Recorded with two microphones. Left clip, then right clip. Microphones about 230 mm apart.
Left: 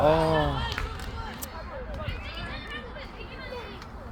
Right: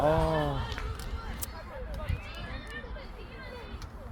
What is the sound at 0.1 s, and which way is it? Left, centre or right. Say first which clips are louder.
Music: left 5 dB; right.